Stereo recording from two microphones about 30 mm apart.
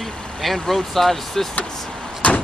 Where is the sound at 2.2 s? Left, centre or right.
Left.